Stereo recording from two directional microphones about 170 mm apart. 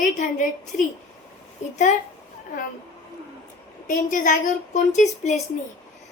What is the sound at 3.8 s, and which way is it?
A woman's voice, 50° left (ahead or behind).